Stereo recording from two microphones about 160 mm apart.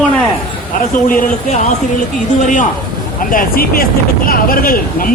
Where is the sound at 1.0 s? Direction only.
60° left (ahead or behind).